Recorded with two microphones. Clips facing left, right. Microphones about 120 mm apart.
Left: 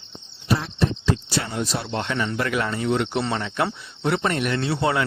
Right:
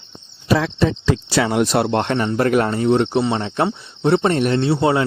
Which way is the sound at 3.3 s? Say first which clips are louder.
Right 5 dB; 25° right (ahead or behind).